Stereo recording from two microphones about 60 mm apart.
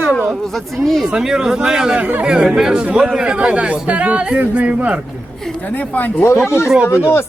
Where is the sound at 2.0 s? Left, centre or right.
Right.